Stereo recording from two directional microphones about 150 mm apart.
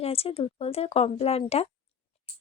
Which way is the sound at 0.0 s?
40° left (ahead or behind).